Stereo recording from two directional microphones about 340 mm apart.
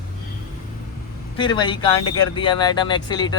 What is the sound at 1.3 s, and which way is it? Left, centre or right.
Speech, centre.